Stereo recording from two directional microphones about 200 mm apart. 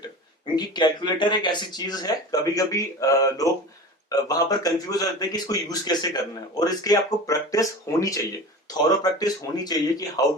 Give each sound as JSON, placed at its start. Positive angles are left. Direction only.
{"t": 0.5, "sound": "speech", "side_deg": 20}